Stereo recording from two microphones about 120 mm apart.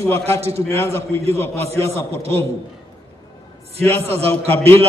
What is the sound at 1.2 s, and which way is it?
Speech, 55° right (ahead or behind).